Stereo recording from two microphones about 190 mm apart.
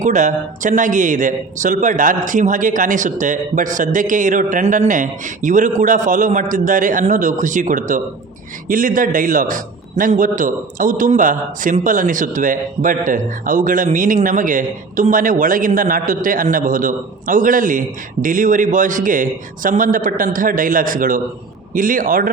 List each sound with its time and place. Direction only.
0.0 s a man's voice: 40° right (ahead or behind)